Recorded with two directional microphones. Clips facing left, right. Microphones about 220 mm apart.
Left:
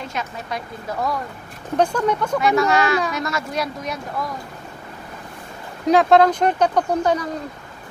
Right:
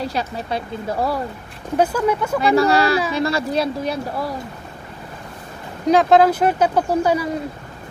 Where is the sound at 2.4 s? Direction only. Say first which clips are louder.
Right 3 dB; 35° right (ahead or behind).